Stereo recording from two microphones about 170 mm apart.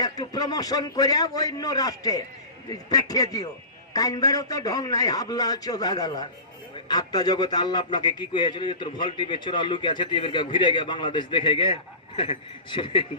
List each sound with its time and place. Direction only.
0.0 s a man's voice: 20° left (ahead or behind)